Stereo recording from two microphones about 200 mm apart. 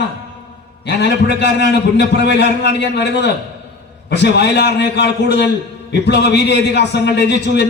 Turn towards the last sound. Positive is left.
turn(degrees=55)  # may be behind; listen again after turning